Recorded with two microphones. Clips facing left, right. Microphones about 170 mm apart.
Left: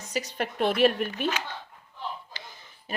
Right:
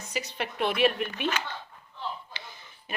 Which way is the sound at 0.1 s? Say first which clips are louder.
Left 3 dB; 45° left (ahead or behind).